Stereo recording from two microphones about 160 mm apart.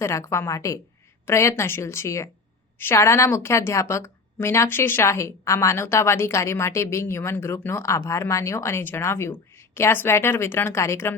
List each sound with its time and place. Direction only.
0.0 s a woman's voice: 20° left (ahead or behind)